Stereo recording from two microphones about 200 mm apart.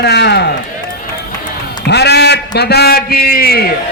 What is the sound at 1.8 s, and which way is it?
A man's voice, 55° left (ahead or behind).